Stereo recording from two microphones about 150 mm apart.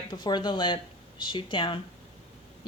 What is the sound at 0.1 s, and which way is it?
Speech, 30° left (ahead or behind).